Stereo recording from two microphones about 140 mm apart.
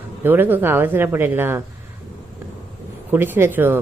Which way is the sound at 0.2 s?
15° right (ahead or behind).